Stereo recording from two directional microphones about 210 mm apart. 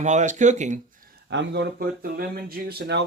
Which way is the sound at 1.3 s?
55° right (ahead or behind).